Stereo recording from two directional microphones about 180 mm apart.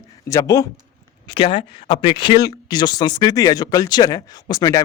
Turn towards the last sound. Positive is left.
turn(degrees=20)  # may be behind; listen again after turning